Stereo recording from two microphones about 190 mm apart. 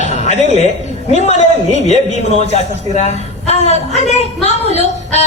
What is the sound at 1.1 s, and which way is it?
A man's voice, 35° left (ahead or behind).